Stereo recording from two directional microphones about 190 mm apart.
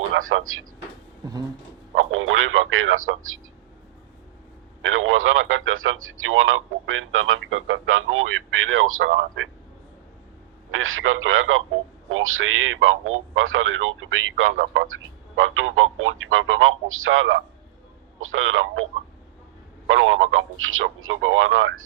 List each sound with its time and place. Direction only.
0.1 s speech: 90° right
2.0 s speech: 90° right
4.8 s speech: 90° right
10.7 s speech: 90° right
14.6 s speech: 75° right (ahead or behind); by 18.9 s 90° right
19.9 s speech: 90° right